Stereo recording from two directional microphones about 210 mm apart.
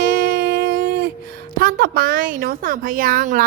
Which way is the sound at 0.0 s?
45° right (ahead or behind).